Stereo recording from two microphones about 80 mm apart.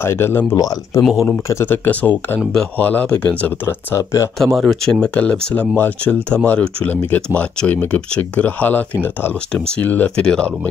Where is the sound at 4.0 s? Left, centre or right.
Left.